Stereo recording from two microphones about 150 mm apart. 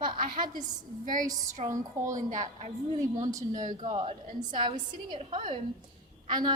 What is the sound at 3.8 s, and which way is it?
A woman's voice, 45° right (ahead or behind).